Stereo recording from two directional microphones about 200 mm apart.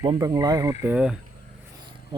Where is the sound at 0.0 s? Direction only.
20° right (ahead or behind).